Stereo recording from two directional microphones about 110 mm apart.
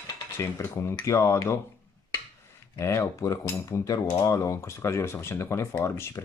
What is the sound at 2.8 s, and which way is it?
Cutlery, 25° left (ahead or behind).